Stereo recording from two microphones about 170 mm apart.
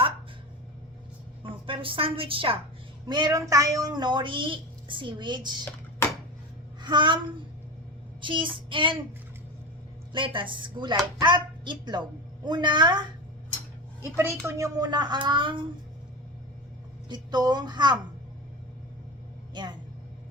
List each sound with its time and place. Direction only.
1.5 s a woman's voice: 30° right (ahead or behind)
6.8 s speech: 30° right (ahead or behind)
8.2 s speech: 30° right (ahead or behind)
10.1 s speech: 30° right (ahead or behind)
14.0 s a woman's voice: 15° right (ahead or behind)
17.1 s speech: 25° right (ahead or behind)
19.6 s speech: 25° right (ahead or behind)